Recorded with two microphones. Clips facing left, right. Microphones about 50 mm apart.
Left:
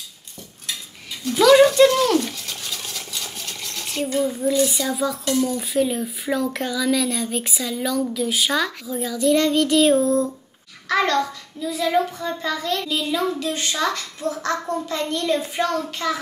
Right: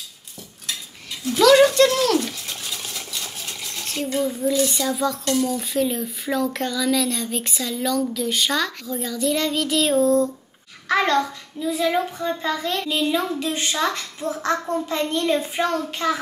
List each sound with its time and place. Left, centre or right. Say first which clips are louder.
1.3 s speech: left 1 dB; centre
10.9 s a child's voice: even; centre